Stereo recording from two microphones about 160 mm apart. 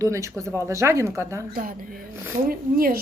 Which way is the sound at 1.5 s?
60° right (ahead or behind).